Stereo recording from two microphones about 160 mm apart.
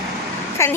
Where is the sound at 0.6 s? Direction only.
15° left (ahead or behind).